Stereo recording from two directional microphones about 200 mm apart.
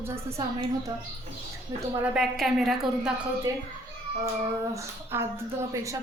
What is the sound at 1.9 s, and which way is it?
A woman's voice, 5° right (ahead or behind).